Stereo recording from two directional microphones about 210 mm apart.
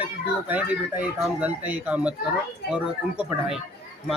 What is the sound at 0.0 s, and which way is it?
Speech, 5° right (ahead or behind).